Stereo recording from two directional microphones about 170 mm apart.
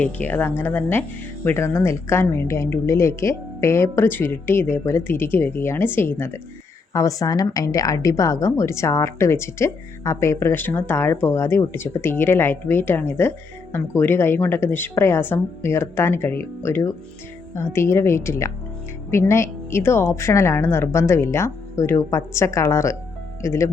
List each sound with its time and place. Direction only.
0.0 s a woman's voice: 10° left (ahead or behind)